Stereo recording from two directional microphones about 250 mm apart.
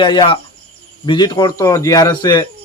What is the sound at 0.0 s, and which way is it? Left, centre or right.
A man's voice, centre.